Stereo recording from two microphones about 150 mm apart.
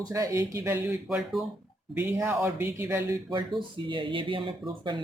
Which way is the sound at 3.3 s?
30° right (ahead or behind).